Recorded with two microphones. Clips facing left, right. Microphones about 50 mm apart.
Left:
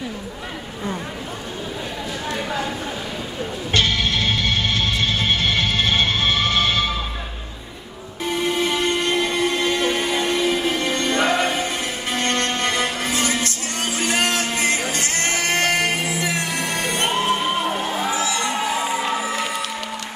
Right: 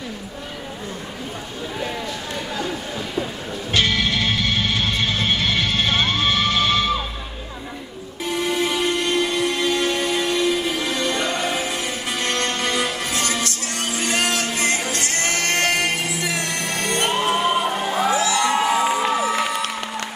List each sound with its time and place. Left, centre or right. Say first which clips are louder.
3.7 s music: even; centre
8.5 s music: even; centre
11.5 s music: even; centre